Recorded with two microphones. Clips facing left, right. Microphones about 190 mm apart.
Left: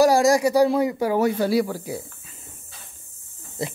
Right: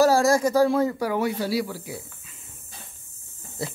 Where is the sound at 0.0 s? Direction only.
15° left (ahead or behind).